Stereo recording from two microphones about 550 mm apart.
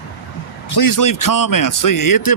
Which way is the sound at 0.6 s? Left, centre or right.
Left.